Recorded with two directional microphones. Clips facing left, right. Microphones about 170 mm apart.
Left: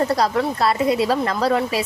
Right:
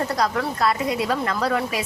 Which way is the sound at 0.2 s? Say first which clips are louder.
Left 3 dB; 30° left (ahead or behind).